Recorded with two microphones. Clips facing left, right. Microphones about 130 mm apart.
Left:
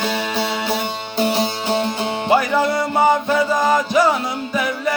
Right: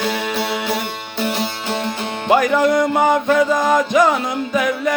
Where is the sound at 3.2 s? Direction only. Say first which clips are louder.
Right 2 dB; 5° left (ahead or behind).